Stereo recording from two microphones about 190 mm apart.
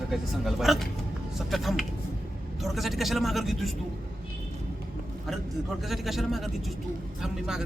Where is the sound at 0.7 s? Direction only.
Centre (ahead or behind).